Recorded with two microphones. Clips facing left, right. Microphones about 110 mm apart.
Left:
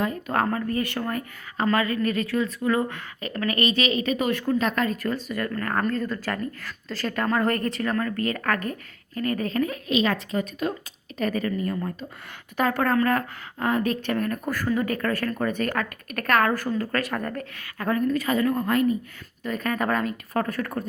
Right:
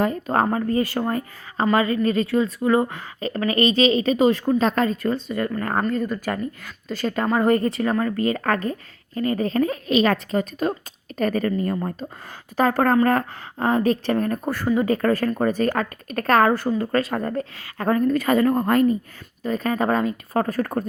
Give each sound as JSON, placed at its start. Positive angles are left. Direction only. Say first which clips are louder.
{"t": 0.0, "sound": "a woman's voice", "louder": "right 4 dB", "side_deg": -30}
{"t": 10.0, "sound": "a woman's voice", "louder": "right 5 dB", "side_deg": -45}
{"t": 19.5, "sound": "a woman's voice", "louder": "right 4 dB", "side_deg": -25}